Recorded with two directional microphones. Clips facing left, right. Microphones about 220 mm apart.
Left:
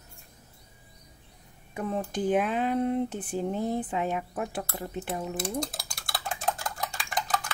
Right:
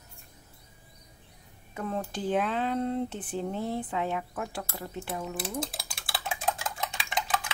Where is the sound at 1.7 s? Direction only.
15° left (ahead or behind).